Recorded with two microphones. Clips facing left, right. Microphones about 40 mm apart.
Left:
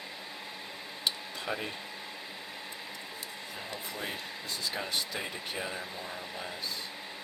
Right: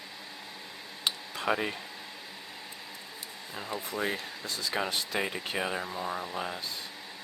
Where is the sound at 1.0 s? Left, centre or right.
Right.